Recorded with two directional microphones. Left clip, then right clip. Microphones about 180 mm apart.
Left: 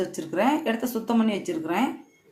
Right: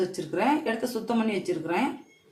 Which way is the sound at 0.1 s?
30° left (ahead or behind).